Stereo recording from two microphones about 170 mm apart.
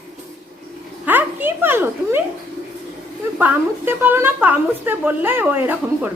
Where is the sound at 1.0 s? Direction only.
10° right (ahead or behind).